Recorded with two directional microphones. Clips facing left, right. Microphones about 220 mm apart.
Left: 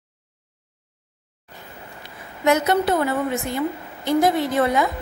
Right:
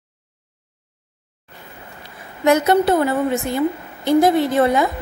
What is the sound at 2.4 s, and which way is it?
A woman's voice, 30° right (ahead or behind).